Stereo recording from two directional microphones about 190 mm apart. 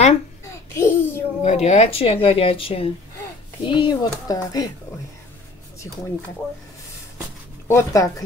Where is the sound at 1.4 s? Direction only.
35° left (ahead or behind); by 4.7 s 20° left (ahead or behind).